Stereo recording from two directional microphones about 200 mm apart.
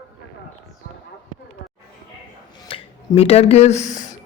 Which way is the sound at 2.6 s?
30° left (ahead or behind).